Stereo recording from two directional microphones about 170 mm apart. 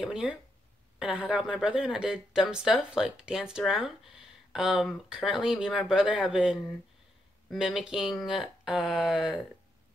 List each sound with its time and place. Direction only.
0.0 s speech: 5° right (ahead or behind)